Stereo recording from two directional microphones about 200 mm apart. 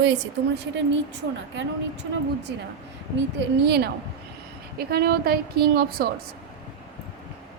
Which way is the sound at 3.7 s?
55° right (ahead or behind).